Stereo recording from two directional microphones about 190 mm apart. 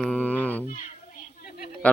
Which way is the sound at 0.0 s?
5° left (ahead or behind).